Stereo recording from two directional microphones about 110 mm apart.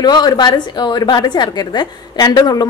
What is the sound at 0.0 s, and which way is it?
A woman's voice, 40° left (ahead or behind).